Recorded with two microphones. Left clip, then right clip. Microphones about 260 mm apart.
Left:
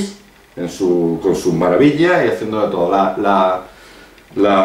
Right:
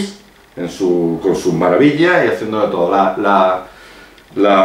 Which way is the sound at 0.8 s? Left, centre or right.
Right.